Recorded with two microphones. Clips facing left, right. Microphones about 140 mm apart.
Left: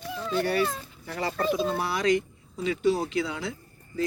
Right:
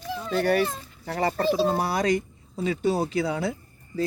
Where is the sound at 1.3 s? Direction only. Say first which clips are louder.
Right 2 dB; 35° right (ahead or behind).